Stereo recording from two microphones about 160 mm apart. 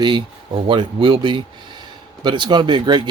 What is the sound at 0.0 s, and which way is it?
Speech, 30° right (ahead or behind).